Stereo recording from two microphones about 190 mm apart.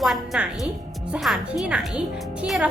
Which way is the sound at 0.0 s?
Centre (ahead or behind).